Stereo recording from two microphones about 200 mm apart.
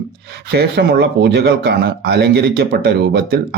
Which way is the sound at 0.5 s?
55° right (ahead or behind).